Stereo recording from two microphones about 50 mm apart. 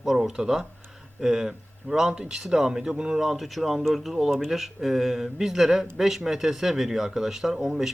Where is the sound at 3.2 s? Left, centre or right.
Centre.